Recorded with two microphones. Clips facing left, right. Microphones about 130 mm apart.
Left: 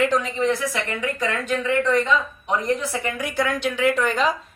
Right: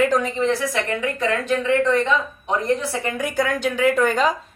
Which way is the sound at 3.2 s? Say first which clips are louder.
Right 2 dB; 45° right (ahead or behind).